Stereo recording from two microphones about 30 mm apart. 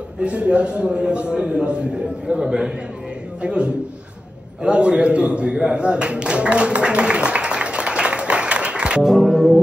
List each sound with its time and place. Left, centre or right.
0.2 s a man's voice: right
2.2 s a man's voice: centre
3.4 s a man's voice: right
5.7 s a sound: right
9.0 s music: centre